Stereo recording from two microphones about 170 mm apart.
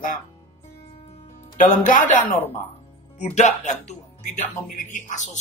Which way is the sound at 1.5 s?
50° left (ahead or behind).